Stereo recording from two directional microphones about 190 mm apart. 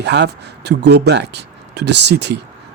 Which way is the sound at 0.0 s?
65° right (ahead or behind).